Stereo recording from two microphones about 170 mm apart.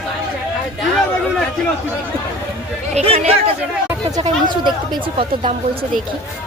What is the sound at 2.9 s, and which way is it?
Speech, 35° right (ahead or behind).